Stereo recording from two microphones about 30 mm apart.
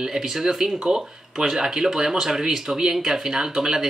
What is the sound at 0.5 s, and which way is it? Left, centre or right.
Speech, centre.